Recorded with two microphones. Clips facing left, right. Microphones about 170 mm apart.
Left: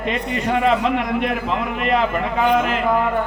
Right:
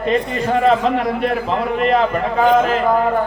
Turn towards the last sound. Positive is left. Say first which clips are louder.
# right 3 dB
turn(degrees=-40)  # may be behind; listen again after turning